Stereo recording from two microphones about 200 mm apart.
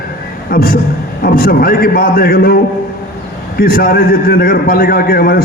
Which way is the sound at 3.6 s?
45° left (ahead or behind).